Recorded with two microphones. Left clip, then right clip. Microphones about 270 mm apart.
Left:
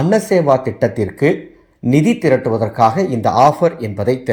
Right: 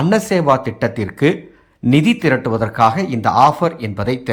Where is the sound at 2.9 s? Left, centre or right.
Centre.